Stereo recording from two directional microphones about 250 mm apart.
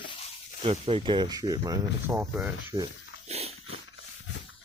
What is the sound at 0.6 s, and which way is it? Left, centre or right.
Speech, right.